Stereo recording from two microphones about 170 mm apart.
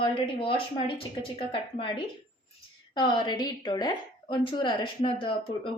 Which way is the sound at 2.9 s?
25° left (ahead or behind).